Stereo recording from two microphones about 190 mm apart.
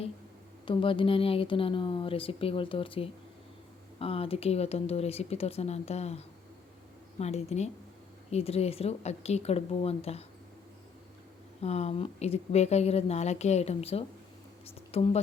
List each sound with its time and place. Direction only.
0.6 s a woman's voice: 25° left (ahead or behind)
11.6 s a woman's voice: 35° left (ahead or behind)